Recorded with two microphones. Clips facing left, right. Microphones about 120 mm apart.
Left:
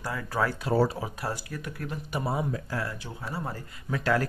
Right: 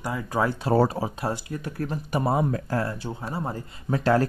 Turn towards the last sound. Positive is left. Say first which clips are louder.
# right 5 dB
turn(degrees=-35)  # may be behind; listen again after turning